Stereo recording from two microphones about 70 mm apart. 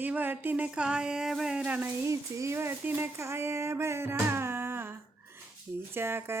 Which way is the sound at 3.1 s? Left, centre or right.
Right.